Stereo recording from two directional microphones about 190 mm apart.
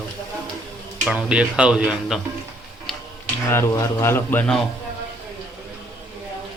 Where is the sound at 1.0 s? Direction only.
5° right (ahead or behind).